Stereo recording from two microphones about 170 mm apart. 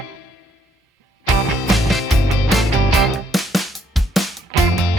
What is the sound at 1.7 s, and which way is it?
Music, centre (ahead or behind).